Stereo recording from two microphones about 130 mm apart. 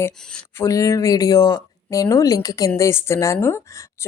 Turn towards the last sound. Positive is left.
turn(degrees=20)  # may be behind; listen again after turning